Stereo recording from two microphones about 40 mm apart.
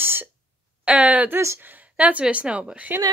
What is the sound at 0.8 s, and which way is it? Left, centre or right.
Speech, right.